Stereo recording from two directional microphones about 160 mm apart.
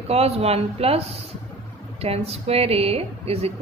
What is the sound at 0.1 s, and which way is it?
Speech, 40° right (ahead or behind).